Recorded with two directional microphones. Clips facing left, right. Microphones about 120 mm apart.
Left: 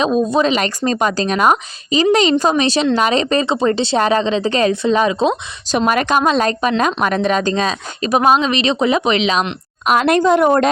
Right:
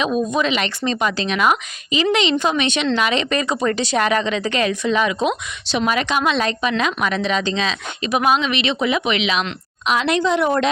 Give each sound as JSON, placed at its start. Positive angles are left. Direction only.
{"t": 0.0, "sound": "speech", "side_deg": 35}
{"t": 5.7, "sound": "a woman's voice", "side_deg": 45}